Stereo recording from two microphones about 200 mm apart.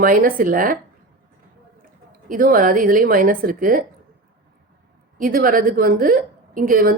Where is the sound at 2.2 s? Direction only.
45° right (ahead or behind).